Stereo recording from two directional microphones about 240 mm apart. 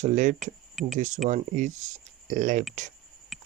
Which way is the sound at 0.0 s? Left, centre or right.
Right.